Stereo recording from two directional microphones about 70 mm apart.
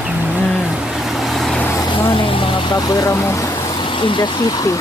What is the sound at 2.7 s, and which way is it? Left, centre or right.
Speech, left.